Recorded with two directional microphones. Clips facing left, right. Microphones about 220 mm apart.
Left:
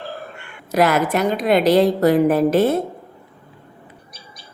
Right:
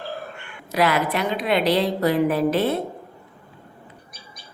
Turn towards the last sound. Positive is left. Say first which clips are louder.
# left 5 dB
turn(degrees=45)  # may be behind; listen again after turning